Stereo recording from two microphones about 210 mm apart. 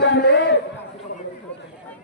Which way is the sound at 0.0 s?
55° left (ahead or behind).